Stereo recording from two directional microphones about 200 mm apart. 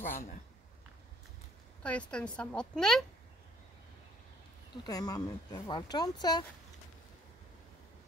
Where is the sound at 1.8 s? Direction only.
5° left (ahead or behind).